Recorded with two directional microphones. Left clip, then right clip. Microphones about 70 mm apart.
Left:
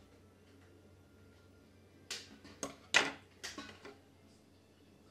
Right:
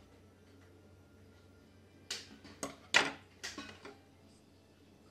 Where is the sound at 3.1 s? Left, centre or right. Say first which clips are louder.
Right 1 dB; right.